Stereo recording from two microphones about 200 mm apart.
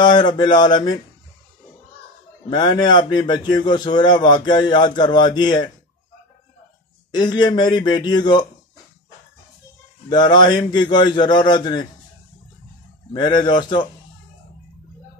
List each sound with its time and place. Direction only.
0.0 s a man's voice: 20° left (ahead or behind)
2.5 s a man's voice: 20° left (ahead or behind)
7.1 s a man's voice: 20° left (ahead or behind)
10.0 s a man's voice: 20° left (ahead or behind)
13.1 s a man's voice: 20° left (ahead or behind)